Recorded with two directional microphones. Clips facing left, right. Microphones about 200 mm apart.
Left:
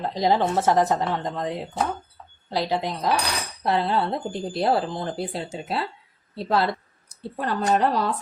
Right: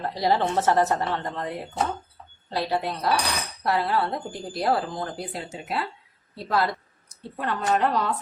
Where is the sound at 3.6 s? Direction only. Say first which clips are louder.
Left 2 dB; 25° left (ahead or behind).